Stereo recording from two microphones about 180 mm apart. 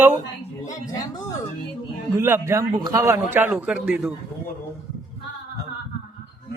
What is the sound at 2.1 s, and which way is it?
A man's voice, 15° right (ahead or behind).